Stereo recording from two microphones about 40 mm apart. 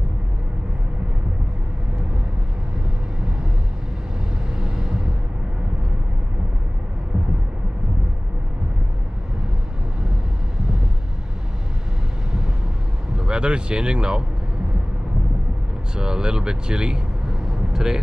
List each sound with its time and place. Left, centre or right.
4.6 s vehicle: centre
13.2 s speech: right
15.9 s speech: centre